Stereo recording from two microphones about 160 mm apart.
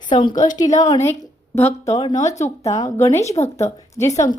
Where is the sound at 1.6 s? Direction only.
40° left (ahead or behind).